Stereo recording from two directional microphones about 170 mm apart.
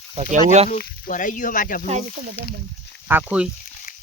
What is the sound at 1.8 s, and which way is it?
Speech, 40° right (ahead or behind).